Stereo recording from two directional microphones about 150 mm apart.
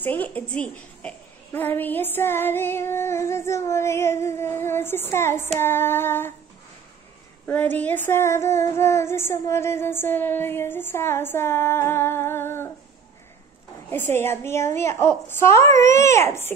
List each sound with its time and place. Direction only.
0.0 s a woman's voice: 10° left (ahead or behind)
7.4 s a woman's voice: 10° left (ahead or behind)
13.8 s a woman's voice: 15° left (ahead or behind)